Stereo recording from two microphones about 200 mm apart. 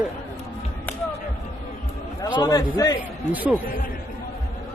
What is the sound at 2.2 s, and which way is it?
Speech, 20° left (ahead or behind).